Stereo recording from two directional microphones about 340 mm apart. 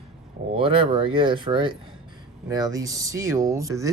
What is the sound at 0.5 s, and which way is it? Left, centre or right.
Speech, centre.